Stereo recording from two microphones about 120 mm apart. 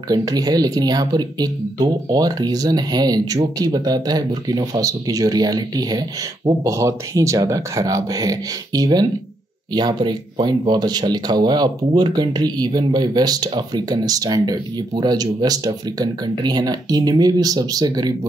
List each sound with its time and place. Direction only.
0.1 s speech: 30° right (ahead or behind)